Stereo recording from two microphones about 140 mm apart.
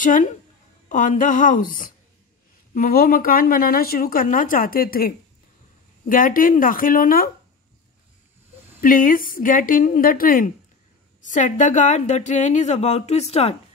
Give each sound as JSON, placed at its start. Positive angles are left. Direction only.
{"t": 0.0, "sound": "a sound", "side_deg": 65}
{"t": 2.7, "sound": "speech", "side_deg": 90}
{"t": 6.0, "sound": "a woman's voice", "side_deg": 80}
{"t": 8.8, "sound": "a woman's voice", "side_deg": 80}
{"t": 11.2, "sound": "speech", "side_deg": 60}